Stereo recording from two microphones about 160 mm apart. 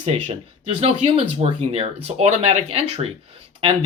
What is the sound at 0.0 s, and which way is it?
Speech, 40° right (ahead or behind).